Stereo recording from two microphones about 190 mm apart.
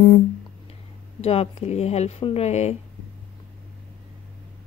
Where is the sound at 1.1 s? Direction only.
35° left (ahead or behind).